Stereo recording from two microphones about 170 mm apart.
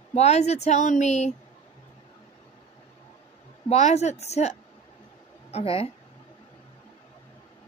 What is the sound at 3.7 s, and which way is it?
A woman's voice, 40° left (ahead or behind).